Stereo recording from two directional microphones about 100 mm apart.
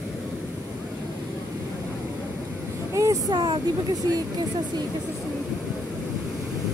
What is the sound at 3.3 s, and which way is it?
Speech, 45° right (ahead or behind).